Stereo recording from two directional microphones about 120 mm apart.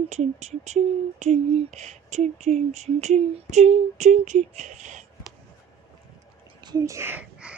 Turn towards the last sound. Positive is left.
turn(degrees=-20)  # may be behind; listen again after turning